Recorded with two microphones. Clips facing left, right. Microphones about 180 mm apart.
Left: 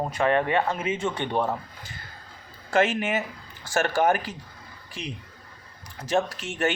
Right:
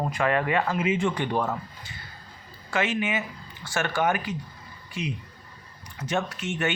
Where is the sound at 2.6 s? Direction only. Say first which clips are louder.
Left 4 dB; 40° left (ahead or behind).